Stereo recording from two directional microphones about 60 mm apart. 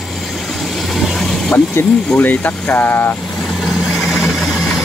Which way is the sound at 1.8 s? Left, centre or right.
Left.